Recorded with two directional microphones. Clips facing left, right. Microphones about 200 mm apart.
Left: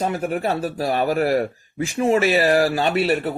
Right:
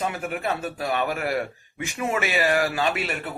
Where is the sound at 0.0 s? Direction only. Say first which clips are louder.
Left 5 dB; 35° left (ahead or behind).